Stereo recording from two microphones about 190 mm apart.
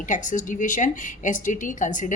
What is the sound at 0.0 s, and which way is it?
Speech, 40° left (ahead or behind).